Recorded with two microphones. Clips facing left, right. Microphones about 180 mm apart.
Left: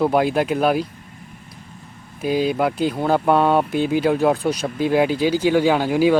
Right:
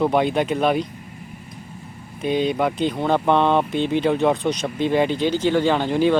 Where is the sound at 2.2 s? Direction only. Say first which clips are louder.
Left 1 dB; 5° left (ahead or behind).